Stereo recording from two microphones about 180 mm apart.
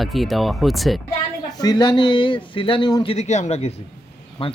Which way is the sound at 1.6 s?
25° left (ahead or behind).